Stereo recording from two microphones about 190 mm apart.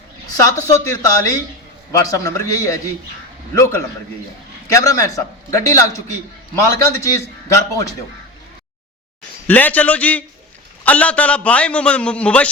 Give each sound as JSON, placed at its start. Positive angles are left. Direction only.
{"t": 0.3, "sound": "a man's voice", "side_deg": 15}
{"t": 9.5, "sound": "a man's voice", "side_deg": 10}